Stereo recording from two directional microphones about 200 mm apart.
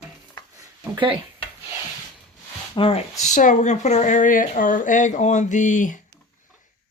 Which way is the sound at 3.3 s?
40° left (ahead or behind).